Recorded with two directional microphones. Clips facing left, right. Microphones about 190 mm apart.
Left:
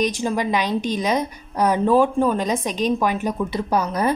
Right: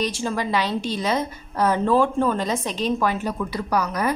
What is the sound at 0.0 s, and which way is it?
A woman's voice, 15° left (ahead or behind).